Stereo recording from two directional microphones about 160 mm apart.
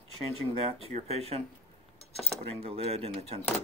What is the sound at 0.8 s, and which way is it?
Speech, 40° right (ahead or behind).